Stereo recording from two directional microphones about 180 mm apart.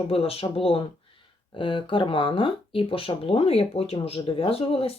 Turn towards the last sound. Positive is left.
turn(degrees=30)  # may be behind; listen again after turning